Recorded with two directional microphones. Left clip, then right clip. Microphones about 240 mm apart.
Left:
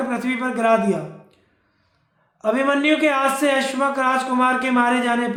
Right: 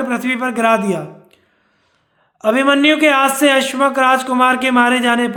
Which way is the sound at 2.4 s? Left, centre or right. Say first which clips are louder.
Right 6 dB; right.